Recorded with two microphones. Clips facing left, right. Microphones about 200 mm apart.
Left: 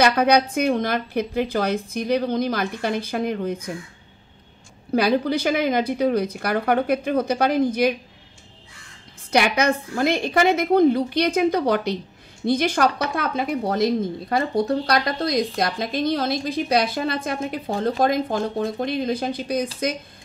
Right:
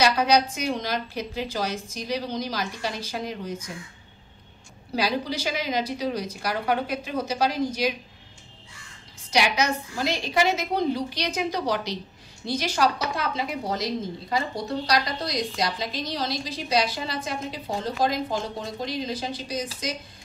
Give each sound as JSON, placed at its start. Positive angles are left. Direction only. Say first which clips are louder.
{"t": 0.0, "sound": "a woman's voice", "louder": "left 4 dB", "side_deg": 55}
{"t": 4.9, "sound": "a woman's voice", "louder": "left 7 dB", "side_deg": 55}
{"t": 9.3, "sound": "a woman's voice", "louder": "left 5 dB", "side_deg": 55}